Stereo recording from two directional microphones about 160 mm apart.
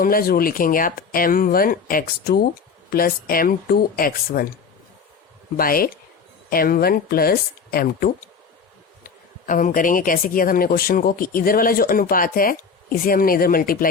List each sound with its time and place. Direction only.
0.0 s speech: 65° left (ahead or behind)
5.5 s speech: 65° left (ahead or behind)